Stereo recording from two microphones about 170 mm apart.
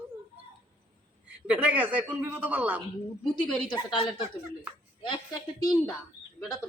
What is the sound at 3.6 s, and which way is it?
Speech, 25° left (ahead or behind).